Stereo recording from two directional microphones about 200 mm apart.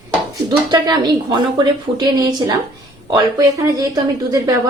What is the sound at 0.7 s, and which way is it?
A woman's voice, 20° right (ahead or behind).